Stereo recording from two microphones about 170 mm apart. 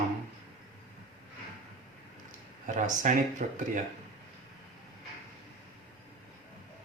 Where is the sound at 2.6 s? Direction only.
45° right (ahead or behind).